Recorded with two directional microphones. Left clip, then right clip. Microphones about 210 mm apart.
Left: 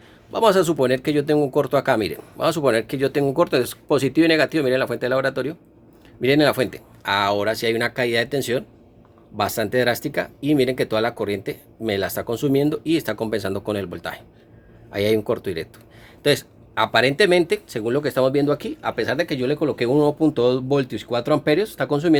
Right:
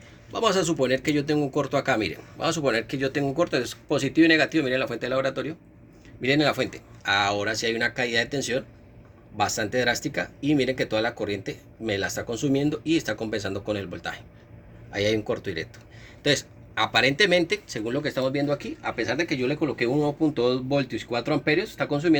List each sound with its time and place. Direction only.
0.3 s speech: 45° left (ahead or behind)